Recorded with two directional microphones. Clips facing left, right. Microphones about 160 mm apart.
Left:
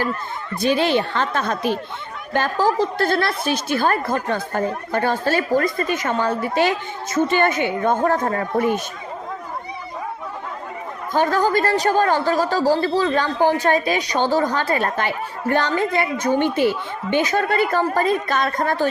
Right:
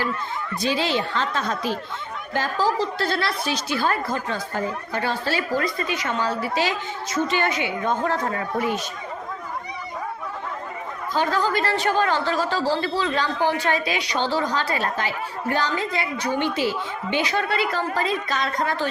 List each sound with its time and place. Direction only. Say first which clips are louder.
0.6 s a woman's voice: left 6 dB; 55° left (ahead or behind)
11.1 s speech: left 4 dB; 50° left (ahead or behind)